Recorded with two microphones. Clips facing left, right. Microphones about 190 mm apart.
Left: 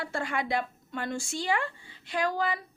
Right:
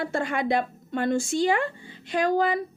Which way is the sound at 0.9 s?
55° right (ahead or behind).